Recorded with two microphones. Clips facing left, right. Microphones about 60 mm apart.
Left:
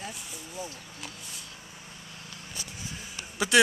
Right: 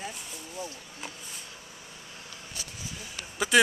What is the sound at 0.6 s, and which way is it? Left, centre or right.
Speech, centre.